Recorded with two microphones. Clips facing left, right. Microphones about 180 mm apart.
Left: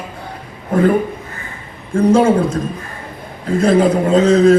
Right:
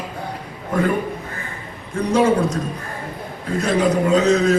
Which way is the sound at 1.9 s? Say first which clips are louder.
Left 6 dB; 25° left (ahead or behind).